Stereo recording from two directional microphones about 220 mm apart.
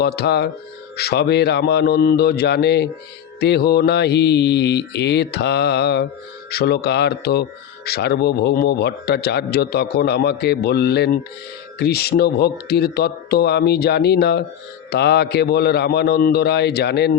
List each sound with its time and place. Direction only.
0.0 s a man's voice: 45° left (ahead or behind)